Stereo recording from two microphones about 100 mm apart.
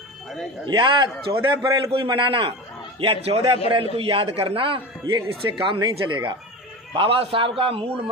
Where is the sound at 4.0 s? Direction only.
65° right (ahead or behind).